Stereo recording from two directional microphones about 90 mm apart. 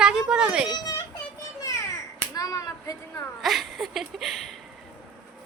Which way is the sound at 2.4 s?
40° left (ahead or behind).